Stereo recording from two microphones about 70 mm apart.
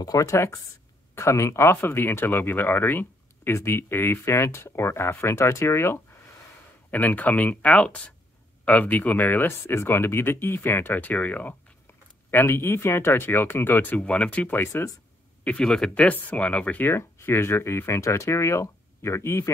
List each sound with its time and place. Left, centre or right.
0.0 s speech: left
6.9 s speech: left
12.3 s speech: left
13.9 s speech: centre
14.6 s speech: left
15.6 s speech: centre
15.9 s speech: centre
16.8 s speech: left